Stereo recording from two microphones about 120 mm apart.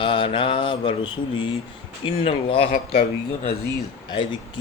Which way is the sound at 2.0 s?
50° left (ahead or behind).